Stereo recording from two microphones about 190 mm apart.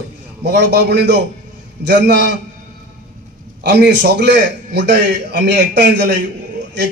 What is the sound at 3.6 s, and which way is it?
A man's voice, 60° right (ahead or behind).